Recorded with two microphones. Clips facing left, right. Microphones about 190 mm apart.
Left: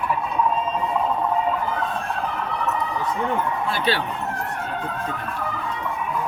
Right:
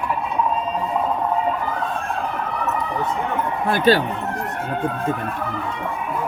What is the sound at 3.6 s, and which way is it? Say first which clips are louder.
Speech: right 12 dB; 50° right (ahead or behind).